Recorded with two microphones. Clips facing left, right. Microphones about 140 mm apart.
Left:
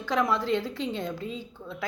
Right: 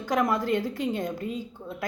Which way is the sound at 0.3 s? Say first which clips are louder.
Right 1 dB; 45° right (ahead or behind).